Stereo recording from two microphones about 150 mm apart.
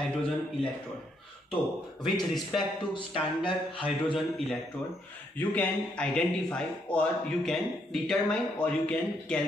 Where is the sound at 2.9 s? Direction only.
35° left (ahead or behind).